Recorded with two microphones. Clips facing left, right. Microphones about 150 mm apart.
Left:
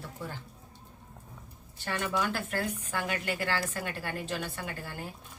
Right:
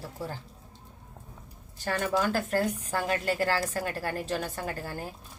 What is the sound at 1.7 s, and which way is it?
A woman's voice, 40° right (ahead or behind).